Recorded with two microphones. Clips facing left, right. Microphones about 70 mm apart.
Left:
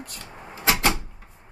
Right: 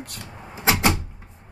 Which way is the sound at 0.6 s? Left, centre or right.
Centre.